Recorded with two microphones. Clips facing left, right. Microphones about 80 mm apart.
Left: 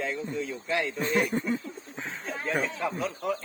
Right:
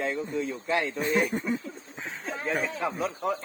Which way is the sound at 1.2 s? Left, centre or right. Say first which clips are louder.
Left 2 dB; centre.